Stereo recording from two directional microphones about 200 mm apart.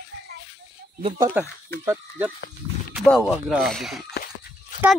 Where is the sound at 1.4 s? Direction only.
10° right (ahead or behind).